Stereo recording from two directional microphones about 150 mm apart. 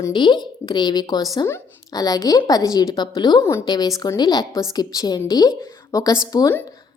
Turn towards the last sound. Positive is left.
turn(degrees=25)  # may be behind; listen again after turning